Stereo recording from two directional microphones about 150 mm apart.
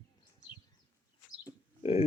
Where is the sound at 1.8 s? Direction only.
40° left (ahead or behind).